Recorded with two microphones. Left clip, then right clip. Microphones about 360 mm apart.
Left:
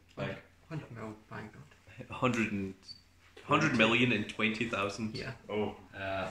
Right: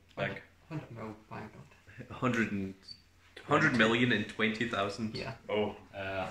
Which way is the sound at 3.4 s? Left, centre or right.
Centre.